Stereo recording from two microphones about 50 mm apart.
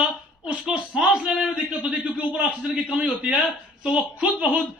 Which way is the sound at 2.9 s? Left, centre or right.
Centre.